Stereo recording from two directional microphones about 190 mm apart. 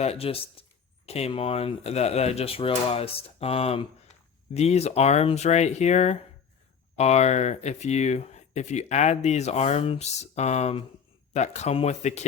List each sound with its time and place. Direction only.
0.0 s speech: 30° left (ahead or behind)